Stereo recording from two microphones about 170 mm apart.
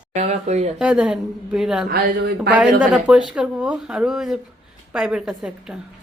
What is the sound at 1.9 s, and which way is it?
Speech, 65° right (ahead or behind).